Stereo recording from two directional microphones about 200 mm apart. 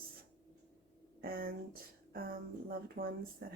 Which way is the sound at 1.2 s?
45° right (ahead or behind).